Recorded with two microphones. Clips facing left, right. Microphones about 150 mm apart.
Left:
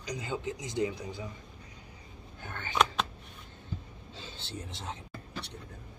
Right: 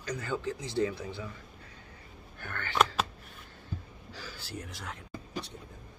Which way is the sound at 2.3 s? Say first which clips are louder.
Right 2 dB; 20° left (ahead or behind).